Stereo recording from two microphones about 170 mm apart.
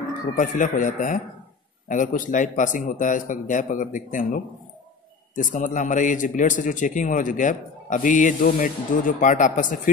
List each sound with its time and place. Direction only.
0.4 s a man's voice: 50° left (ahead or behind)